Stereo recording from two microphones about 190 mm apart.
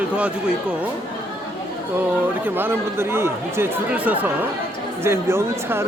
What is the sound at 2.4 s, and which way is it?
Speech, 10° right (ahead or behind).